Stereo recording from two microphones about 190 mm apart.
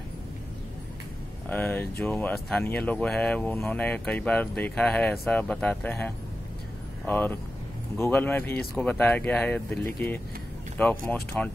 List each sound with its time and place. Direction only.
1.5 s speech: 10° left (ahead or behind)